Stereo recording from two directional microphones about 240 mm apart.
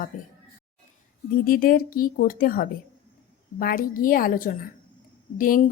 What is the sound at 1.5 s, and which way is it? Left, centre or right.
Speech, left.